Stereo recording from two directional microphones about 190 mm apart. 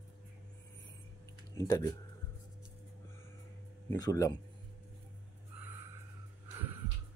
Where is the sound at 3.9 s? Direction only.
15° left (ahead or behind).